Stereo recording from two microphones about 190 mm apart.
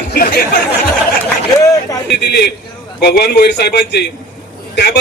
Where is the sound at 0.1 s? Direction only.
55° left (ahead or behind).